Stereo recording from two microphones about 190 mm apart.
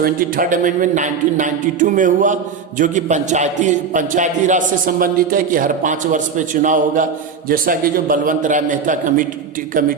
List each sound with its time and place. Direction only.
0.0 s a man's voice: 50° right (ahead or behind)